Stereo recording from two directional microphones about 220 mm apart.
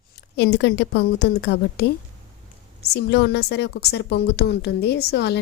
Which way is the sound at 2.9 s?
50° left (ahead or behind).